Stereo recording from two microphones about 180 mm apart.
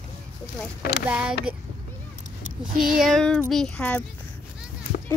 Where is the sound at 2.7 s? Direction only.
50° right (ahead or behind).